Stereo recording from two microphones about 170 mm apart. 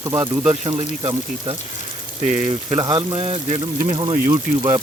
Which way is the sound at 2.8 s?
25° right (ahead or behind).